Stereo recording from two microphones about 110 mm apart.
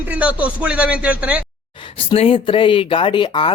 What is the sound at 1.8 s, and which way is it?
Speech, 55° left (ahead or behind).